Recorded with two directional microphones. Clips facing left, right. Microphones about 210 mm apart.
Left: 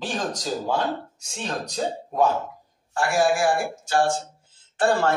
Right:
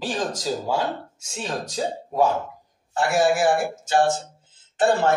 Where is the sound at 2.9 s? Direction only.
20° right (ahead or behind).